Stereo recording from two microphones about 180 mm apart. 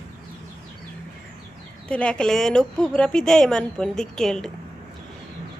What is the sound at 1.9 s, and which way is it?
A woman's voice, 5° left (ahead or behind).